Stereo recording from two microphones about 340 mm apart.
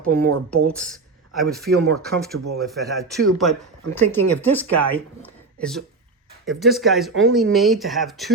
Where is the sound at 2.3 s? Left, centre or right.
Right.